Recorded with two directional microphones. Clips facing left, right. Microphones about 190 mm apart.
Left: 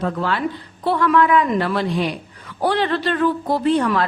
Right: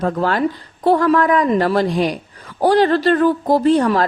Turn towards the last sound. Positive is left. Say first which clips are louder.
# right 4 dB
turn(degrees=-40)  # may be behind; listen again after turning